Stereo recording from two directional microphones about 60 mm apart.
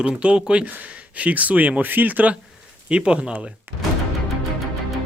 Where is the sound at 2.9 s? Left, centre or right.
Centre.